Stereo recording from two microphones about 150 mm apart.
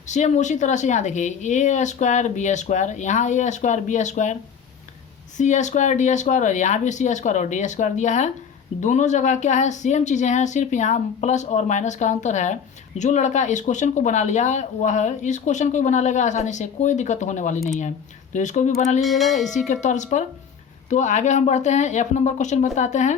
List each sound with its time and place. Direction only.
0.1 s speech: 50° left (ahead or behind)
5.4 s speech: 55° left (ahead or behind)
19.0 s speech: centre (ahead or behind)
19.6 s speech: 55° left (ahead or behind)